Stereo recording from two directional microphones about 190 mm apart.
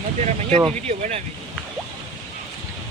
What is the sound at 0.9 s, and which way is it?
Speech, 35° right (ahead or behind).